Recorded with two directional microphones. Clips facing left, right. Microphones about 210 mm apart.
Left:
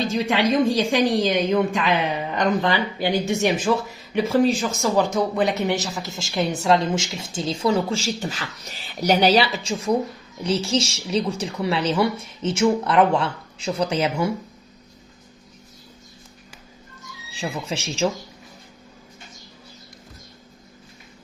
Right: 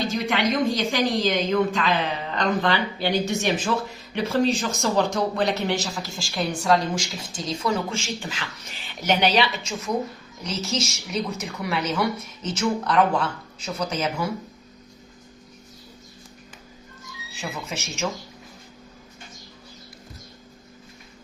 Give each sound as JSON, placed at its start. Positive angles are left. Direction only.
{"t": 0.7, "sound": "a woman's voice", "side_deg": 30}
{"t": 1.5, "sound": "speech", "side_deg": 15}
{"t": 5.9, "sound": "a woman's voice", "side_deg": 20}
{"t": 17.3, "sound": "speech", "side_deg": 30}